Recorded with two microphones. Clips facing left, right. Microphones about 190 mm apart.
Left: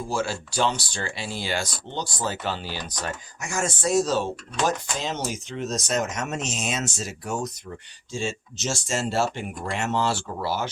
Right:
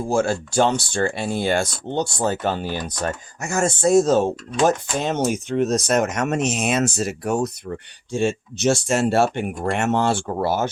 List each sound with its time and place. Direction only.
0.1 s speech: 50° right (ahead or behind)